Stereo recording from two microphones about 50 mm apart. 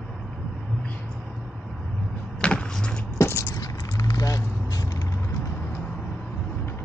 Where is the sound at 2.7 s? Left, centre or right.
Centre.